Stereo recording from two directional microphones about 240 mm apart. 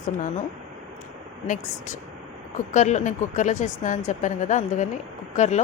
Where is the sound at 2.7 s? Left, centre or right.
Left.